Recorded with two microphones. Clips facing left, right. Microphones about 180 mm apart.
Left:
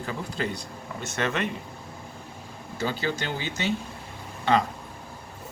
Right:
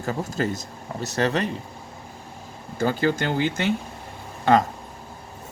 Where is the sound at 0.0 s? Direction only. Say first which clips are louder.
Right 5 dB; 45° right (ahead or behind).